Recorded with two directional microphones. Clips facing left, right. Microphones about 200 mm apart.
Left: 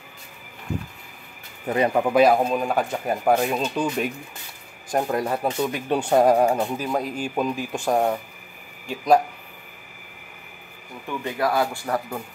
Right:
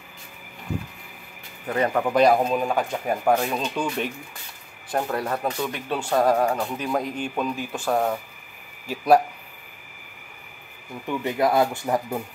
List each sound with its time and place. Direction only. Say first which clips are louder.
1.7 s speech: left 2 dB; 15° left (ahead or behind)
4.9 s speech: left 2 dB; 15° left (ahead or behind)
6.8 s speech: even; 5° left (ahead or behind)
8.8 s speech: even; 5° right (ahead or behind)
11.1 s speech: right 2 dB; 20° right (ahead or behind)